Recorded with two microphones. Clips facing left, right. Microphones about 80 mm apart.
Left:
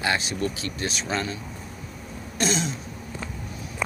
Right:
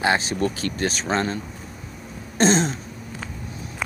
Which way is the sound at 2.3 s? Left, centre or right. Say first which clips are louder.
Right 7 dB; right.